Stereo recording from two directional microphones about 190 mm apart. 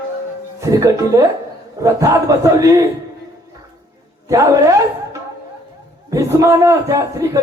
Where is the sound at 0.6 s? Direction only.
15° right (ahead or behind).